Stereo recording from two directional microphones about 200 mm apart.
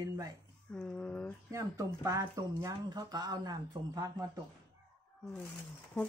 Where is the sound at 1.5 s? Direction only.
15° right (ahead or behind).